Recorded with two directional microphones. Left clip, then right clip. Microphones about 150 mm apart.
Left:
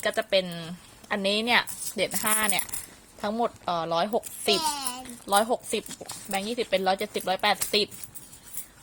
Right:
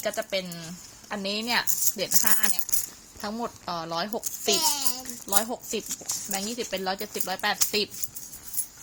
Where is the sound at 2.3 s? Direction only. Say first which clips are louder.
Left 3 dB; 15° left (ahead or behind).